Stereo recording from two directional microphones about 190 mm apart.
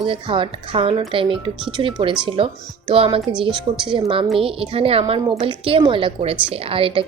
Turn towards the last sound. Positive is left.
turn(degrees=-30)  # may be behind; listen again after turning